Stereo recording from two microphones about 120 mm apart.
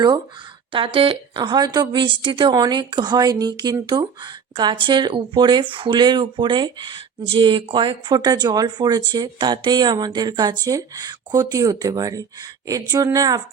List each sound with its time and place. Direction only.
0.9 s speech: 45° right (ahead or behind)